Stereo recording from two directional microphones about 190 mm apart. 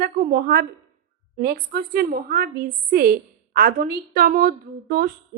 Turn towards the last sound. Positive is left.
turn(degrees=-50)  # may be behind; listen again after turning